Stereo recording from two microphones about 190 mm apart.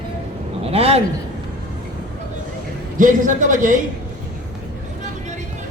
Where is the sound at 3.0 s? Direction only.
45° right (ahead or behind).